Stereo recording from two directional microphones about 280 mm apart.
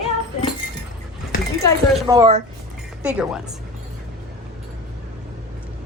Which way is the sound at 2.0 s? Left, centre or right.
Centre.